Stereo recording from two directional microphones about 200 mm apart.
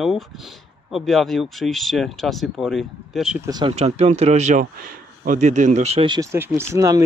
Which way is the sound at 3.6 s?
30° right (ahead or behind).